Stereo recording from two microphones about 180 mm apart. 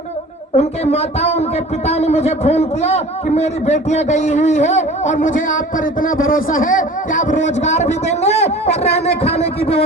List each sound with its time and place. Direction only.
0.5 s a man's voice: 35° left (ahead or behind)